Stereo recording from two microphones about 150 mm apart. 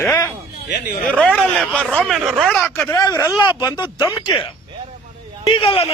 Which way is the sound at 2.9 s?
25° left (ahead or behind).